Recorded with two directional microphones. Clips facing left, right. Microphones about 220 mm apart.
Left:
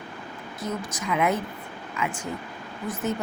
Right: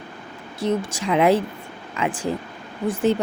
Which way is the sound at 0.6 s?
30° right (ahead or behind).